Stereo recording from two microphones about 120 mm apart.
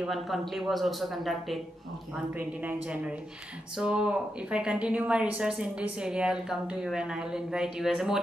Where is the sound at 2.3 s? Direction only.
15° right (ahead or behind).